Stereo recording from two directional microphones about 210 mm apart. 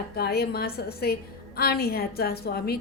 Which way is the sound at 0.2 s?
50° left (ahead or behind).